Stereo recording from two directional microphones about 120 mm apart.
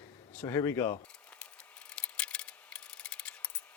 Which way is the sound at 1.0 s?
10° left (ahead or behind).